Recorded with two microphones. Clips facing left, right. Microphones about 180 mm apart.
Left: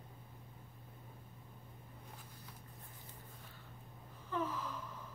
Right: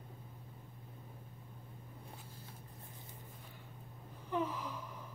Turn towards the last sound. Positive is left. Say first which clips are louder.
# even
turn(degrees=-15)  # may be behind; listen again after turning